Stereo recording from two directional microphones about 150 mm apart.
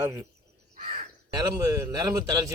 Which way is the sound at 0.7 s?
65° right (ahead or behind).